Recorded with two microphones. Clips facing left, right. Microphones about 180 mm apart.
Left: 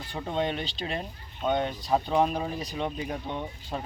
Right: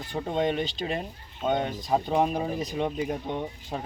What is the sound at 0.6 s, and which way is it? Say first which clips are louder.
Speech: right 4 dB; 45° right (ahead or behind).